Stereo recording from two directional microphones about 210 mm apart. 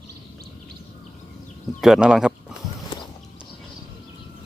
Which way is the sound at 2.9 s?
25° left (ahead or behind).